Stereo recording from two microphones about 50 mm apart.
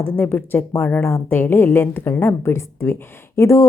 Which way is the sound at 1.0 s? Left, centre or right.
Left.